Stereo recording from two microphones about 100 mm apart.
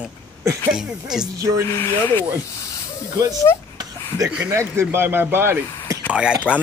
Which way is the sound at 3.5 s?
30° left (ahead or behind).